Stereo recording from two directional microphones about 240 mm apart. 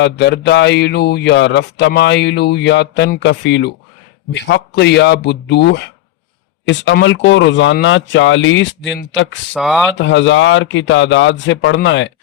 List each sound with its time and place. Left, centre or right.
0.0 s speech: left
9.5 s speech: centre
9.9 s speech: left